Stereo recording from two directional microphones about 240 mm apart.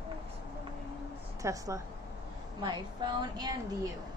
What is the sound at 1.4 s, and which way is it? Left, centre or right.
A woman's voice, centre.